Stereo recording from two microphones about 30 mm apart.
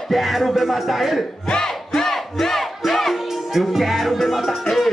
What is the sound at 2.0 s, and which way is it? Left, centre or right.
Battle cry, centre.